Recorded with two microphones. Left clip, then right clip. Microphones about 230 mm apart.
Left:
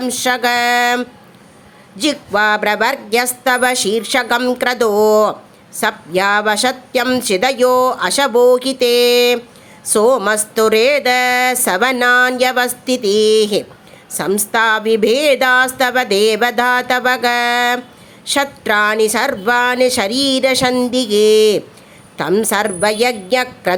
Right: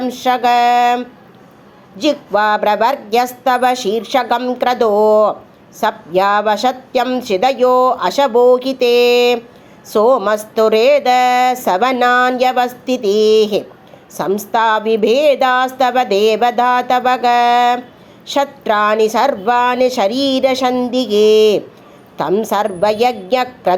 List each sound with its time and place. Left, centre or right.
0.0 s a woman's voice: left
22.8 s a woman's voice: left